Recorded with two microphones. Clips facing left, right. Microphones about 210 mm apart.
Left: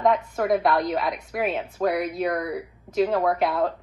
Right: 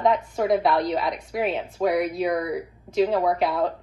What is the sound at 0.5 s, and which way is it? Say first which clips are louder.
A woman's voice: even; 5° left (ahead or behind).